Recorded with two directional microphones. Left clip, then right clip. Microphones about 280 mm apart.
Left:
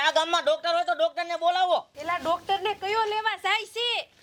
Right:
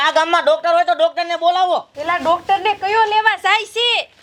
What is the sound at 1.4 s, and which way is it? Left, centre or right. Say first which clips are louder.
Speech: right 7 dB; centre.